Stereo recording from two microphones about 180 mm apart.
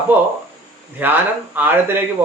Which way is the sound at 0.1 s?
10° right (ahead or behind).